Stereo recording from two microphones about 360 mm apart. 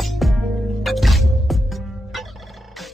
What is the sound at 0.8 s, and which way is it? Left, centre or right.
Gobble, centre.